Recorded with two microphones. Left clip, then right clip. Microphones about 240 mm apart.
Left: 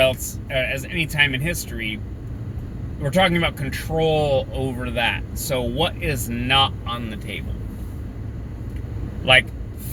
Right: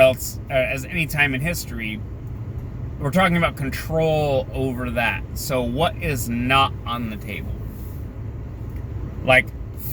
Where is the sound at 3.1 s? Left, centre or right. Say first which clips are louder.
Even; centre.